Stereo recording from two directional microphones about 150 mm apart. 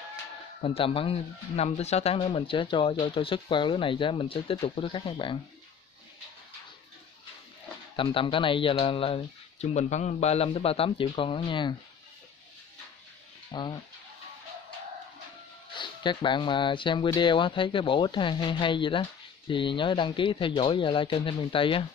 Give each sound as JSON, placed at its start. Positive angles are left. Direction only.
{"t": 0.6, "sound": "speech", "side_deg": 40}
{"t": 7.9, "sound": "speech", "side_deg": 35}
{"t": 13.5, "sound": "speech", "side_deg": 30}
{"t": 15.7, "sound": "speech", "side_deg": 30}